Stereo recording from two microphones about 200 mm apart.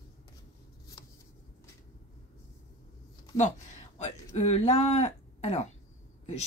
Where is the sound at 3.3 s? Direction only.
35° left (ahead or behind).